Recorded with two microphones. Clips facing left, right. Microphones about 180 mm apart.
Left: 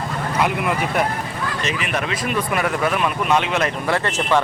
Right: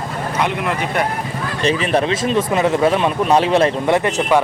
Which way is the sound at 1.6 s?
30° right (ahead or behind).